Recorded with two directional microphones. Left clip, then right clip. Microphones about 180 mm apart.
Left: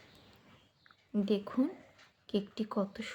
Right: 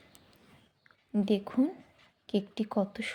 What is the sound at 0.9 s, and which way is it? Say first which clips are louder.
Speech: right 3 dB; 30° right (ahead or behind).